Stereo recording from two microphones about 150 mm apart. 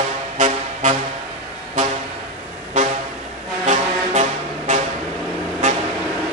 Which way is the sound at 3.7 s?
50° right (ahead or behind).